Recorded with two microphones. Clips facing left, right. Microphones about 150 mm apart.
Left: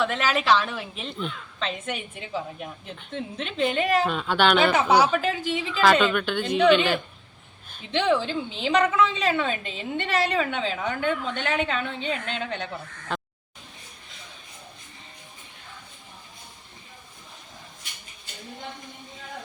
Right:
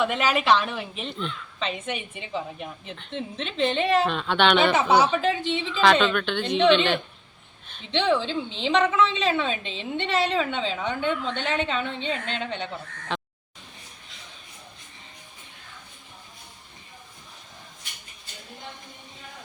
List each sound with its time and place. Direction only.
0.0 s a woman's voice: 5° right (ahead or behind)